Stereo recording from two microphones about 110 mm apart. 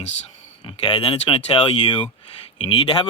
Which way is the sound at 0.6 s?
55° left (ahead or behind).